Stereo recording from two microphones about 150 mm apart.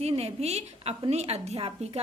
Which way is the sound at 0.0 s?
45° right (ahead or behind).